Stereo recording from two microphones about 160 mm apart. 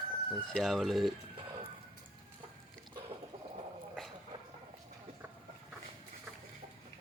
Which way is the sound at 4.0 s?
Centre (ahead or behind).